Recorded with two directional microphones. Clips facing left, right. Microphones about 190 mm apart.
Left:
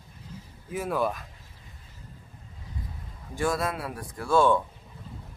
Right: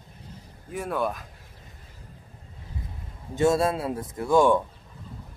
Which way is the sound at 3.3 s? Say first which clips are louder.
Right 6 dB; 25° right (ahead or behind).